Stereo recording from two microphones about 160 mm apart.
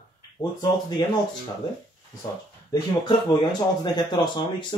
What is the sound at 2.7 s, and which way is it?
Speech, 30° left (ahead or behind).